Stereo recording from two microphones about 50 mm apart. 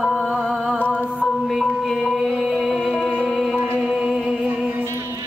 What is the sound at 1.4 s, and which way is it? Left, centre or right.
Music, centre.